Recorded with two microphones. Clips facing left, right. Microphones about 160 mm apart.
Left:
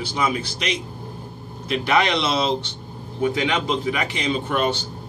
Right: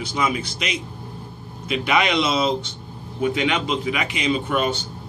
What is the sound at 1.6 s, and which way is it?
Speech, 5° right (ahead or behind).